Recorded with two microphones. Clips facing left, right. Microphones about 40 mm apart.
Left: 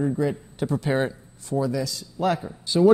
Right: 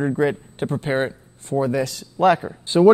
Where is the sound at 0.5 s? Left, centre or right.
Right.